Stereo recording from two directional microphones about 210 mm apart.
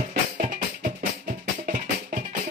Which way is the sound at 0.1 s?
40° right (ahead or behind).